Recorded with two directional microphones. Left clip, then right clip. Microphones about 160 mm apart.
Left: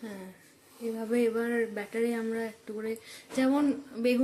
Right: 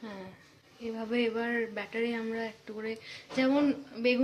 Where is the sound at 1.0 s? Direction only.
15° left (ahead or behind).